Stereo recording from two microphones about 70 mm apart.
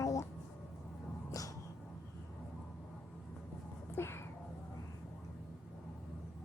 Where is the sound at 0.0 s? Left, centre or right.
Left.